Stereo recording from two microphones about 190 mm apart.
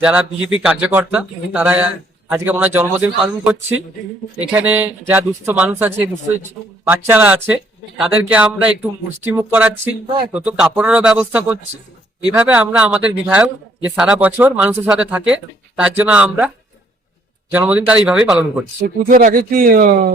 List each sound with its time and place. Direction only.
0.0 s speech: 5° right (ahead or behind)
17.5 s speech: 10° right (ahead or behind)
18.8 s speech: 50° right (ahead or behind)